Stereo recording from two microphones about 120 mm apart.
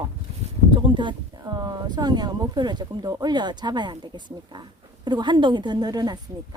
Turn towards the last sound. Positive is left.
turn(degrees=-35)  # may be behind; listen again after turning